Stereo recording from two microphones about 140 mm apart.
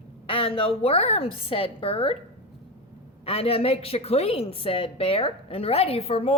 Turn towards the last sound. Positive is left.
turn(degrees=45)  # may be behind; listen again after turning